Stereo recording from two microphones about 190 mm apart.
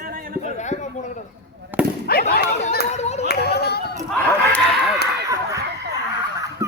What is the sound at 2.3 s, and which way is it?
Speech, 55° left (ahead or behind).